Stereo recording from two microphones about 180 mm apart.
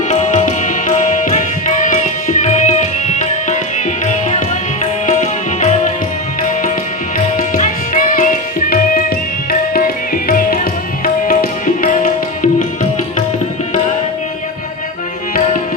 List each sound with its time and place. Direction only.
0.1 s music: 40° left (ahead or behind)
7.2 s tabla: 45° left (ahead or behind)